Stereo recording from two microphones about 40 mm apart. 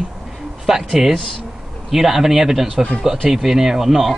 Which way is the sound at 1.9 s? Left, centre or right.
Centre.